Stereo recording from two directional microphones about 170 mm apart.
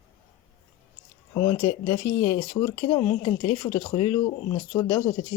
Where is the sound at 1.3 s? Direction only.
15° left (ahead or behind).